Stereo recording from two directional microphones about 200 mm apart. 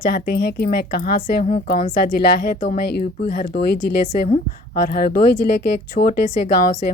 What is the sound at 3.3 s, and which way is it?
A woman's voice, 55° left (ahead or behind).